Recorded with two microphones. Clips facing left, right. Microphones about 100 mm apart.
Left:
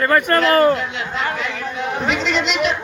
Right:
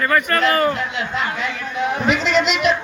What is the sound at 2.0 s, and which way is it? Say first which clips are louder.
Speech: right 1 dB; 50° right (ahead or behind).